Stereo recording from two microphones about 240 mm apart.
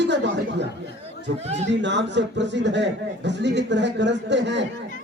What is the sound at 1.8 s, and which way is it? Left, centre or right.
A man's voice, right.